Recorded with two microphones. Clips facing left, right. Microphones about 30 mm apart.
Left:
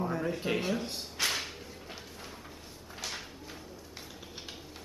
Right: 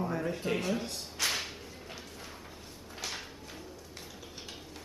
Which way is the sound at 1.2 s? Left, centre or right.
Centre.